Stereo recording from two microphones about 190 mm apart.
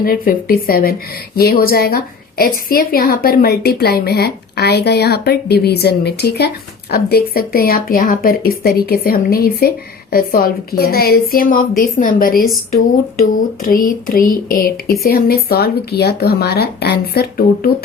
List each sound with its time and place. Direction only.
0.0 s a woman's voice: 50° left (ahead or behind)
13.7 s a woman's voice: 50° left (ahead or behind)